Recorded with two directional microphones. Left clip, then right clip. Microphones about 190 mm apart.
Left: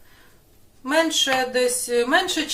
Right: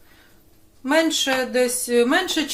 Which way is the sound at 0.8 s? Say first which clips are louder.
Right 1 dB; 25° right (ahead or behind).